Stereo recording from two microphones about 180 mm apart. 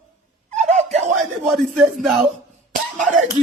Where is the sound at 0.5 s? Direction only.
40° right (ahead or behind).